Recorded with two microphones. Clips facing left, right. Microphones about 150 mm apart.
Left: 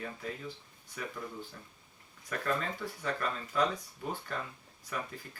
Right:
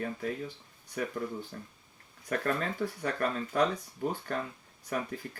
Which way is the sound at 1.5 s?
45° right (ahead or behind).